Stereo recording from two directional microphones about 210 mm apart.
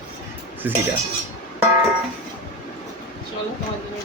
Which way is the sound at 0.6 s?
10° right (ahead or behind).